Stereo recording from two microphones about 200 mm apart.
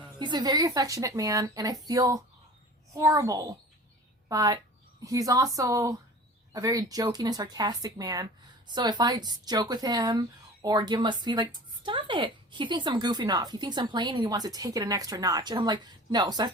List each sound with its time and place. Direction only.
0.2 s speech: 20° right (ahead or behind)